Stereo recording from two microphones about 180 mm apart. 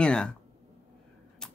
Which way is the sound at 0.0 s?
5° left (ahead or behind).